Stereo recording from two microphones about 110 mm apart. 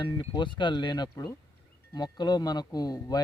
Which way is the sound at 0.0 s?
45° left (ahead or behind).